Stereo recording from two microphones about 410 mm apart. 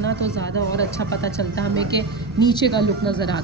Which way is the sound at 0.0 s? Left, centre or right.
Right.